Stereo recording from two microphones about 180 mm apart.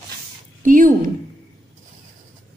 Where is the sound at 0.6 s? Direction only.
50° right (ahead or behind).